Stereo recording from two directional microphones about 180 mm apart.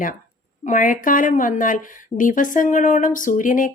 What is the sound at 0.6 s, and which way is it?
Speech, 45° left (ahead or behind).